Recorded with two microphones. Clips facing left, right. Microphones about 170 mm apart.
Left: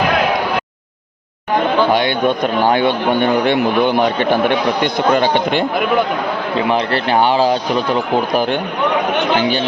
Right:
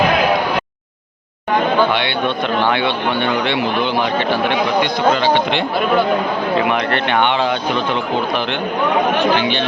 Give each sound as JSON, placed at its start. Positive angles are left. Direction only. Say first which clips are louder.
{"t": 1.9, "sound": "a man's voice", "louder": "left 4 dB", "side_deg": 40}
{"t": 6.6, "sound": "speech", "louder": "left 4 dB", "side_deg": 30}